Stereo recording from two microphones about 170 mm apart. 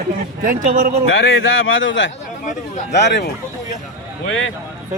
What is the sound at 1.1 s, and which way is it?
Speech, 90° left.